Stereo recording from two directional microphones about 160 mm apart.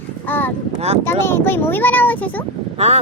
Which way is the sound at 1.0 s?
15° left (ahead or behind).